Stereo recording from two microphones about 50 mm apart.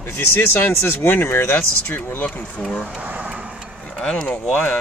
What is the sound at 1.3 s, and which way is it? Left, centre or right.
Speech, left.